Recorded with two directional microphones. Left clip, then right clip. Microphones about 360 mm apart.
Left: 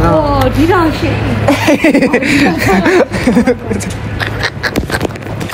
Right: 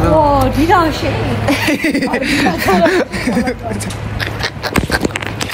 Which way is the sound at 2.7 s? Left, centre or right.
Centre.